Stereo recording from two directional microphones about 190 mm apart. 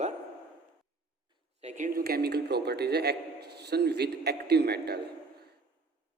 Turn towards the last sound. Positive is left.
turn(degrees=-55)  # may be behind; listen again after turning